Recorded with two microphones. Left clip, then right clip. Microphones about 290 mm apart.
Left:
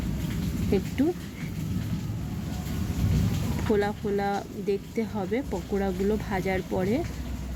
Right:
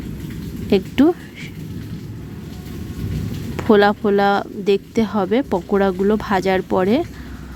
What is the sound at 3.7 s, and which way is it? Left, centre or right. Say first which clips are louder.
Speech: right 13 dB; right.